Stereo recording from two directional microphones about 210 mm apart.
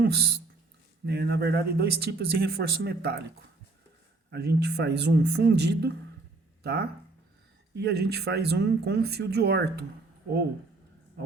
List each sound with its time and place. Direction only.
0.0 s speech: 50° right (ahead or behind)